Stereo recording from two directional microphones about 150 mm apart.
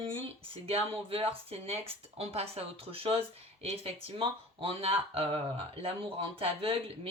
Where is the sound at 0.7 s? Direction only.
40° right (ahead or behind).